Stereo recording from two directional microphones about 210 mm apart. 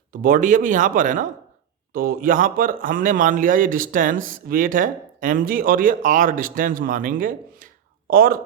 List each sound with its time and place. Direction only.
0.1 s speech: 40° right (ahead or behind)